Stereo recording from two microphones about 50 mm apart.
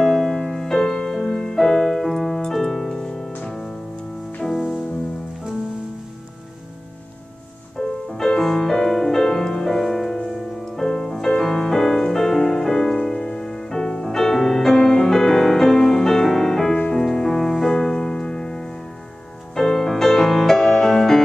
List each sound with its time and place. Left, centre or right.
0.0 s music: centre
7.7 s music: centre
16.7 s music: left
17.0 s music: centre